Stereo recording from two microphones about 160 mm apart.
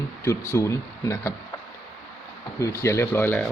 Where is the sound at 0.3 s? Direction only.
20° left (ahead or behind).